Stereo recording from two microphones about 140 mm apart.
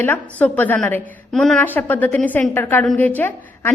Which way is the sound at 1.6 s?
15° left (ahead or behind).